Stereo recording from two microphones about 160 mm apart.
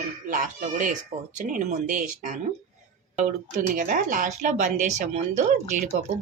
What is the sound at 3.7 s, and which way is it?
Speech, 60° right (ahead or behind).